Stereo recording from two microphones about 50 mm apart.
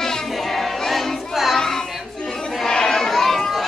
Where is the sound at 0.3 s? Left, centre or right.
Centre.